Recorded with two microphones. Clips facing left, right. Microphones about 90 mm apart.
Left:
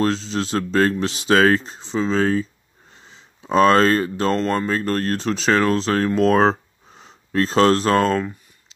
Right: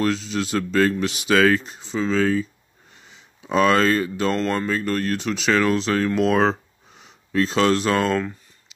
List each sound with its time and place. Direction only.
0.0 s speech: 30° left (ahead or behind)